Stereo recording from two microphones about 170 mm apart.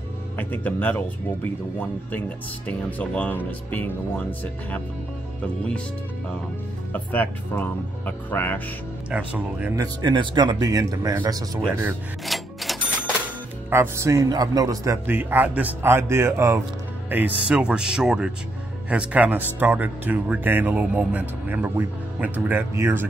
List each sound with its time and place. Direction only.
0.4 s speech: 10° left (ahead or behind)
6.9 s speech: 10° left (ahead or behind)
9.1 s speech: 10° right (ahead or behind)
9.8 s speech: 25° right (ahead or behind)
12.3 s cash register: centre (ahead or behind)
13.7 s speech: 15° right (ahead or behind)